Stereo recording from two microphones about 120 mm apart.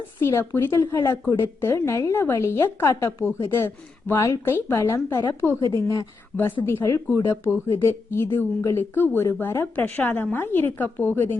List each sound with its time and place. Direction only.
0.2 s speech: 20° left (ahead or behind)
6.3 s a woman's voice: 5° left (ahead or behind)
6.7 s a woman's voice: 20° left (ahead or behind)